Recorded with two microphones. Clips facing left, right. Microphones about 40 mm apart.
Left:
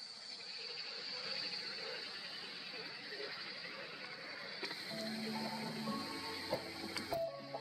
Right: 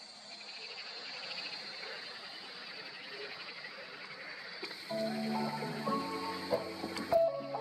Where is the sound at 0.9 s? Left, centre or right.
Right.